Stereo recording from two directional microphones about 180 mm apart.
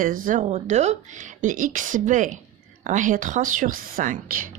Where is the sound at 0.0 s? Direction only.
50° right (ahead or behind).